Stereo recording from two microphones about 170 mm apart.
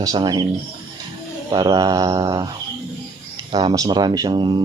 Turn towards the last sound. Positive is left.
turn(degrees=-30)  # may be behind; listen again after turning